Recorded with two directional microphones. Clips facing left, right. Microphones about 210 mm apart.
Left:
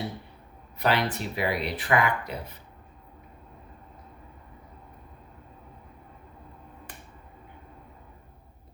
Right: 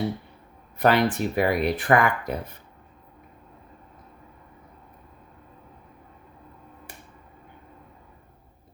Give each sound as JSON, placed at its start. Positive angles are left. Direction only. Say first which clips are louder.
{"t": 0.8, "sound": "speech", "louder": "right 6 dB", "side_deg": -50}